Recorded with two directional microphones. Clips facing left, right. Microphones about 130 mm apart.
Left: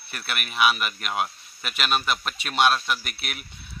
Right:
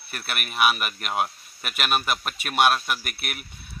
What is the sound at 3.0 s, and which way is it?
Speech, 50° right (ahead or behind).